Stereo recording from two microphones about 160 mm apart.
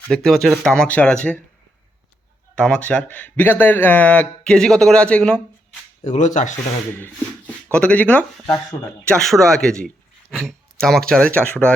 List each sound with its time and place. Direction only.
0.1 s speech: centre (ahead or behind)
2.6 s a man's voice: 5° left (ahead or behind)
6.0 s speech: 50° left (ahead or behind)
6.9 s speech: 10° left (ahead or behind)